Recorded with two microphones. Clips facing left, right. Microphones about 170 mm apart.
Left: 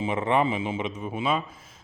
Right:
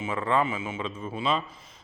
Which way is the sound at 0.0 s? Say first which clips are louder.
Left 3 dB; 20° left (ahead or behind).